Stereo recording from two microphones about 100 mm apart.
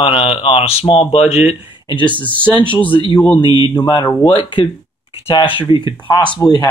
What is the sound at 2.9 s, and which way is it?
Speech, 55° left (ahead or behind).